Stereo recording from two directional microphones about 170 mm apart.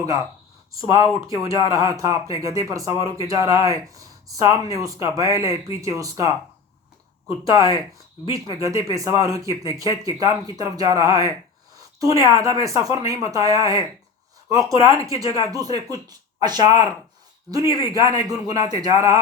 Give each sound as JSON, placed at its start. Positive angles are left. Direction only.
{"t": 0.8, "sound": "speech", "side_deg": -20}